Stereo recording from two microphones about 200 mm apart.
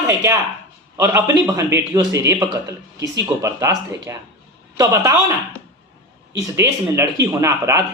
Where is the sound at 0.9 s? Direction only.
15° right (ahead or behind).